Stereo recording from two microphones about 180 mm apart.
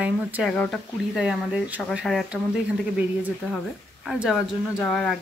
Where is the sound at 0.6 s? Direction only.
5° left (ahead or behind).